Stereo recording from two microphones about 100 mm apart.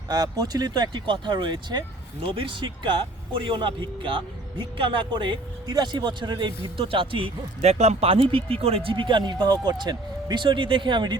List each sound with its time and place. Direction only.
0.1 s speech: 40° right (ahead or behind)
2.2 s a man's voice: 60° right (ahead or behind)